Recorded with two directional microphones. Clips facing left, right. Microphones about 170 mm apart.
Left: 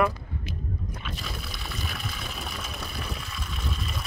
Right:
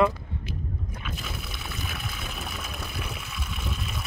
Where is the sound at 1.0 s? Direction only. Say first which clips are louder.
Even; centre (ahead or behind).